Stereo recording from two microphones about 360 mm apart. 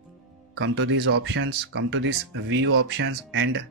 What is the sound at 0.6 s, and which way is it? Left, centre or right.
Speech, right.